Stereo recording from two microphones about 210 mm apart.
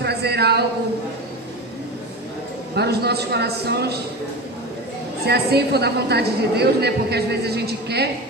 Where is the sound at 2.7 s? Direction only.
50° right (ahead or behind).